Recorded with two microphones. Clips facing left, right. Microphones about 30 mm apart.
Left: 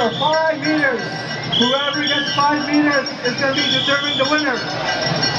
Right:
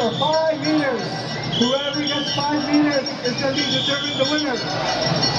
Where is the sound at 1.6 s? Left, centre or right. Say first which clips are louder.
Left 3 dB; left.